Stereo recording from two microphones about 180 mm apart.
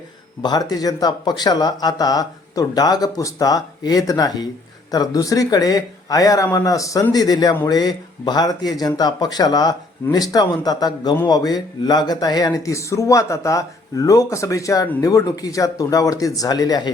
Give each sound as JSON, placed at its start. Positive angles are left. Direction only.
{"t": 0.4, "sound": "speech", "side_deg": 20}